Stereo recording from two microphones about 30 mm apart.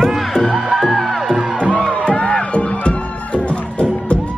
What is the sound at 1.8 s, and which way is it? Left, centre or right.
Music, left.